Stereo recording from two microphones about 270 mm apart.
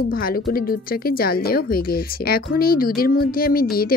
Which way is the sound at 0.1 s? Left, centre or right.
Left.